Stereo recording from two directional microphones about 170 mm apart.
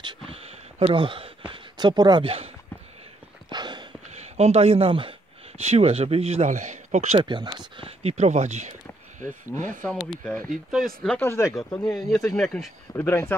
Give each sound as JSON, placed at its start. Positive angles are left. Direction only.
{"t": 0.3, "sound": "a sound", "side_deg": -35}
{"t": 4.1, "sound": "speech", "side_deg": -40}
{"t": 10.0, "sound": "speech", "side_deg": 5}
{"t": 11.9, "sound": "speech", "side_deg": 0}
{"t": 12.9, "sound": "speech", "side_deg": 15}